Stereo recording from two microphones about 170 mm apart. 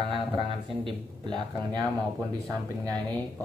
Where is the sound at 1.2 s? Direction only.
25° right (ahead or behind).